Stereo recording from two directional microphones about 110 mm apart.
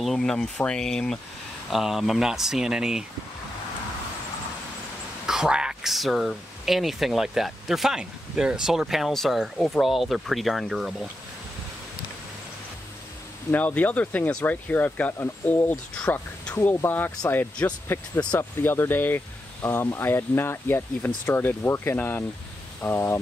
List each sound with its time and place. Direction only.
0.0 s speech: 5° left (ahead or behind)
5.2 s speech: 5° right (ahead or behind)
13.5 s speech: 15° left (ahead or behind)
15.9 s speech: 10° left (ahead or behind)